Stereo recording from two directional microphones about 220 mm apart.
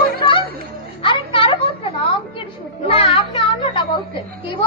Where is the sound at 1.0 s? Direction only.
25° left (ahead or behind).